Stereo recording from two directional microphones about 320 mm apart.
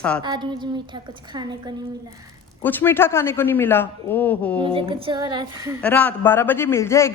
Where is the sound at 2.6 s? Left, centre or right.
Centre.